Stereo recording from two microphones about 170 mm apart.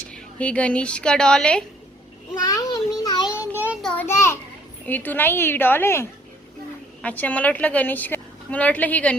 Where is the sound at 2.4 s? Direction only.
20° left (ahead or behind).